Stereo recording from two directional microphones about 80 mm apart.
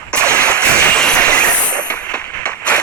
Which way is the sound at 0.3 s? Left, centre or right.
Centre.